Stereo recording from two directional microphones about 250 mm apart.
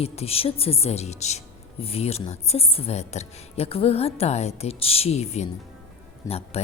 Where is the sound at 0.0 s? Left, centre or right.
Left.